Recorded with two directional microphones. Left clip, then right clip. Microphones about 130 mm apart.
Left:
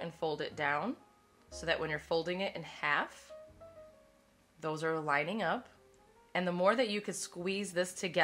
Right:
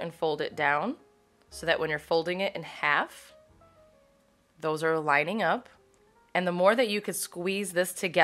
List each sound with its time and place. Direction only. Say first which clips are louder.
0.0 s speech: right 7 dB; 30° right (ahead or behind)
4.6 s speech: right 8 dB; 35° right (ahead or behind)